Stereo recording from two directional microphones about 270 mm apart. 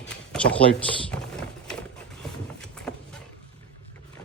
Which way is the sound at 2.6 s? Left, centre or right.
Centre.